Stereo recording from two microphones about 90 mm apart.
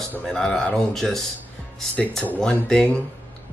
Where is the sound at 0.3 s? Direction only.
5° left (ahead or behind).